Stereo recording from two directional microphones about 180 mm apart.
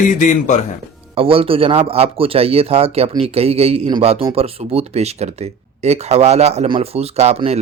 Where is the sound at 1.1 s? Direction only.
30° right (ahead or behind).